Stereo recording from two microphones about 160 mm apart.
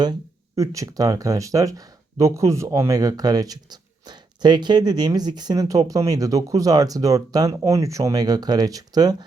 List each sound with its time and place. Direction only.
0.0 s speech: 20° right (ahead or behind)